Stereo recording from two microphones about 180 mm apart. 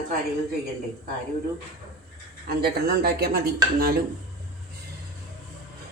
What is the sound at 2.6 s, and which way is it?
Speech, 60° right (ahead or behind).